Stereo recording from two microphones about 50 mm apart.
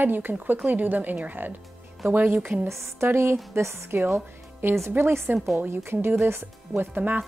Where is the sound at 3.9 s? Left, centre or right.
Right.